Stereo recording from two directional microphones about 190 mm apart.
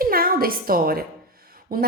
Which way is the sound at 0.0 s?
50° right (ahead or behind).